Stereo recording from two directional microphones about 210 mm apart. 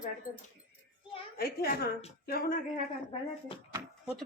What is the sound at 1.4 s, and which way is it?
A child's voice, 45° left (ahead or behind).